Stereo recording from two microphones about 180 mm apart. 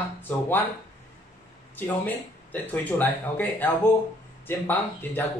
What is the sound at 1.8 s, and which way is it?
Speech, 10° left (ahead or behind).